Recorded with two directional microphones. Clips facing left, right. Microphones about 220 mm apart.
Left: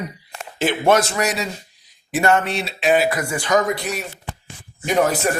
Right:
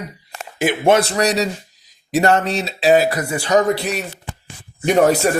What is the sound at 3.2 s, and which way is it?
Speech, 25° right (ahead or behind).